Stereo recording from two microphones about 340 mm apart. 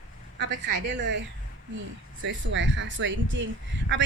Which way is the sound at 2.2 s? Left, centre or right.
Right.